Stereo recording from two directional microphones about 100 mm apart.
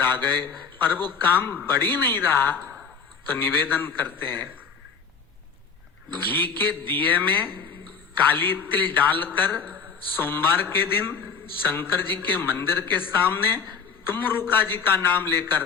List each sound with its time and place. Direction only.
0.0 s a man's voice: 20° left (ahead or behind)
6.1 s a man's voice: 20° left (ahead or behind)